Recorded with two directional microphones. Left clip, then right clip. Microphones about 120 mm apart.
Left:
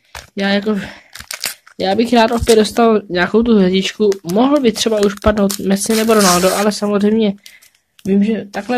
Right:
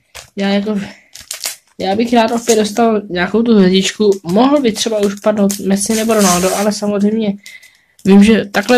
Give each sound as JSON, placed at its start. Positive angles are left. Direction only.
{"t": 0.4, "sound": "speech", "side_deg": 45}
{"t": 3.5, "sound": "speech", "side_deg": 15}
{"t": 4.7, "sound": "speech", "side_deg": 35}
{"t": 8.1, "sound": "speech", "side_deg": -20}